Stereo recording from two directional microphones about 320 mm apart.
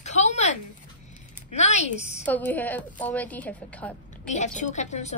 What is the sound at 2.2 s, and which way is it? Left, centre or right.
A woman's voice, centre.